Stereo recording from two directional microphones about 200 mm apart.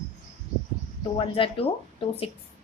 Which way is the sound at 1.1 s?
25° left (ahead or behind).